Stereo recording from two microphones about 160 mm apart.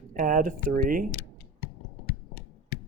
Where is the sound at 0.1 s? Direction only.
55° right (ahead or behind).